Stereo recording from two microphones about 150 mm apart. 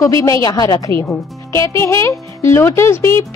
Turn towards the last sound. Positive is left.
turn(degrees=20)  # may be behind; listen again after turning